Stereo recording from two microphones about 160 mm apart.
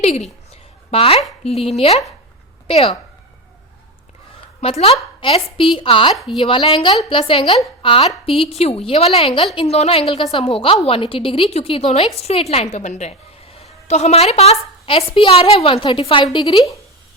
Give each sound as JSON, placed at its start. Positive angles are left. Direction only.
{"t": 0.0, "sound": "a sound", "side_deg": 40}
{"t": 1.5, "sound": "a woman's voice", "side_deg": 40}
{"t": 4.6, "sound": "a woman's voice", "side_deg": 40}
{"t": 6.1, "sound": "speech", "side_deg": 0}
{"t": 6.4, "sound": "a woman's voice", "side_deg": 35}